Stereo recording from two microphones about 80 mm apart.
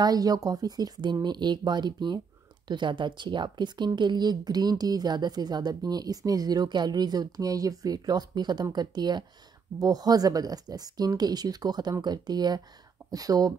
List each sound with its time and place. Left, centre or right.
0.0 s speech: right
2.7 s speech: right